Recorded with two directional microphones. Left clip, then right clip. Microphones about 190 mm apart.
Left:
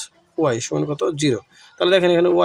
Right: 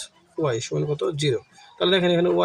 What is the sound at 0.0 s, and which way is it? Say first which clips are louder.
Speech: left 5 dB; 45° left (ahead or behind).